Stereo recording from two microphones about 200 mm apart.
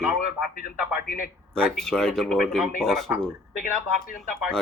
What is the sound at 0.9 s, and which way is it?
Speech, 45° left (ahead or behind).